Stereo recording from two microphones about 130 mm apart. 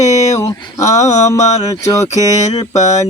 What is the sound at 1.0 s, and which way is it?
Mantra, 60° left (ahead or behind).